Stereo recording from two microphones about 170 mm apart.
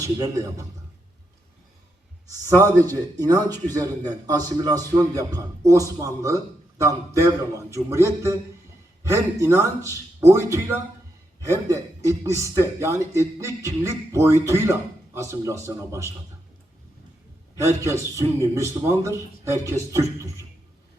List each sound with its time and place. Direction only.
0.0 s a man's voice: 20° right (ahead or behind)
2.2 s a man's voice: 20° right (ahead or behind)
17.6 s speech: 15° right (ahead or behind)